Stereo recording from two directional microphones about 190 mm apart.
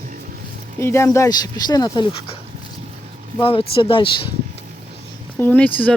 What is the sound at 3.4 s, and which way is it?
Speech, 30° left (ahead or behind).